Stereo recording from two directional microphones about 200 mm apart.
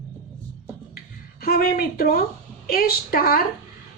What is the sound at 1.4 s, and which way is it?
A woman's voice, 45° left (ahead or behind).